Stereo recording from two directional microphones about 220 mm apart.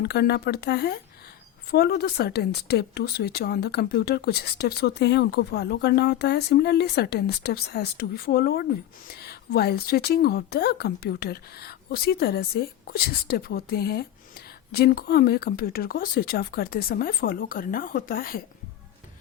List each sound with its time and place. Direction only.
0.0 s speech: 45° left (ahead or behind)